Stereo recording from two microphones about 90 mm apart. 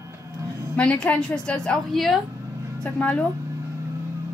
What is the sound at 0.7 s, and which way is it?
A woman's voice, 15° left (ahead or behind).